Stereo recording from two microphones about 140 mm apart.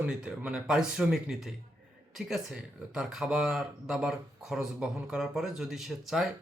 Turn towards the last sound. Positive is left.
turn(degrees=0)  # may be behind; listen again after turning